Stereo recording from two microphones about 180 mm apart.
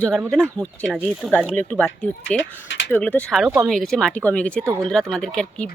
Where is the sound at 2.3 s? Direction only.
90° left.